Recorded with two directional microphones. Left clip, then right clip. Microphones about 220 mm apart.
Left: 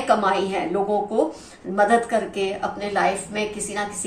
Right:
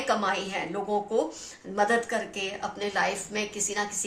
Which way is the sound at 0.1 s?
40° right (ahead or behind).